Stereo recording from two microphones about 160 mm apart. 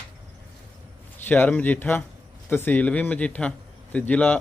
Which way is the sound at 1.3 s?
10° left (ahead or behind).